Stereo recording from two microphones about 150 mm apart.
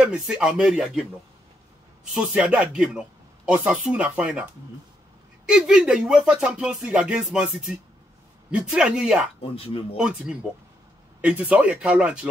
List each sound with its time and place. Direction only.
0.0 s music: 5° right (ahead or behind)
2.1 s speech: 5° right (ahead or behind)
5.5 s music: 5° right (ahead or behind)
8.5 s speech: 5° right (ahead or behind)
9.4 s speech: 40° left (ahead or behind)
9.9 s music: 5° right (ahead or behind)
11.1 s speech: 10° right (ahead or behind)